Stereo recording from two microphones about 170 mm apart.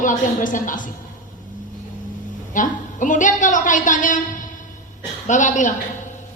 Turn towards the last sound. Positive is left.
turn(degrees=50)  # may be behind; listen again after turning